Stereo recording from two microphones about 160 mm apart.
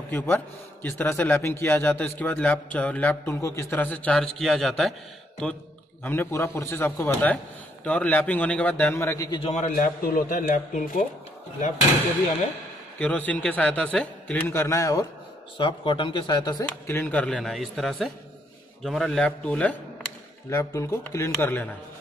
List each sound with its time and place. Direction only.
0.8 s speech: 15° left (ahead or behind)
9.4 s a man's voice: 45° left (ahead or behind)
13.0 s speech: 10° left (ahead or behind)
15.5 s speech: 30° left (ahead or behind)
16.6 s speech: 10° left (ahead or behind)
20.4 s speech: 20° left (ahead or behind)